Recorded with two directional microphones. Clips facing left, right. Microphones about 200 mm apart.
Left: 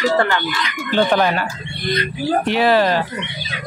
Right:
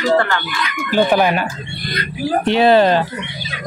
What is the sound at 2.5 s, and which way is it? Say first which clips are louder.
Speech: right 5 dB; 25° right (ahead or behind).